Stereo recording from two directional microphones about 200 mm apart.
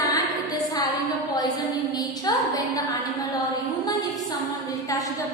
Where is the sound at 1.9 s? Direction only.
20° left (ahead or behind).